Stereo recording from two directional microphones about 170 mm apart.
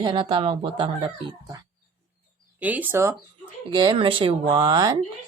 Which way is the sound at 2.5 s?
10° right (ahead or behind).